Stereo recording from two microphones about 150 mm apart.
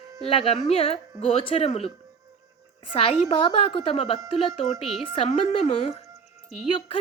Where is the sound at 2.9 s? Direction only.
40° left (ahead or behind).